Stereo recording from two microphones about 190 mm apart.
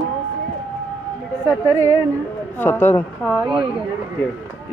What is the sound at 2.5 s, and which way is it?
Speech, 10° left (ahead or behind).